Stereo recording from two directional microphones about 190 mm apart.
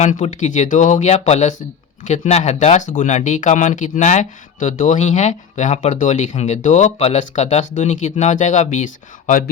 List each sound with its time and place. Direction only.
0.0 s speech: 35° left (ahead or behind)